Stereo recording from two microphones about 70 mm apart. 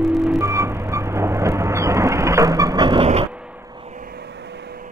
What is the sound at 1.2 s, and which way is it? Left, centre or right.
Vehicle, right.